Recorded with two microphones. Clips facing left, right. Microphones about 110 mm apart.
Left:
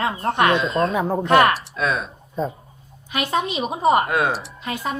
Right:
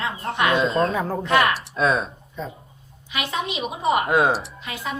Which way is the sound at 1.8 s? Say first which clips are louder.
Right 2 dB; 30° right (ahead or behind).